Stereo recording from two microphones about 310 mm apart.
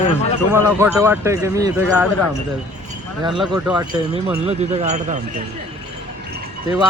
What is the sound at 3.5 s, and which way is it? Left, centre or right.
Speech, centre.